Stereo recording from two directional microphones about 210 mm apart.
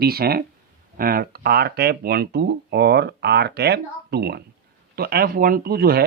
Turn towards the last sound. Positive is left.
turn(degrees=-45)  # may be behind; listen again after turning